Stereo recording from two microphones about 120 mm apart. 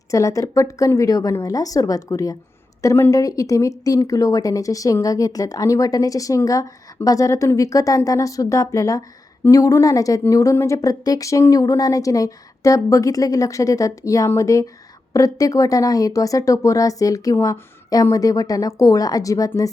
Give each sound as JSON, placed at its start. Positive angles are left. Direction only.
{"t": 0.1, "sound": "speech", "side_deg": 25}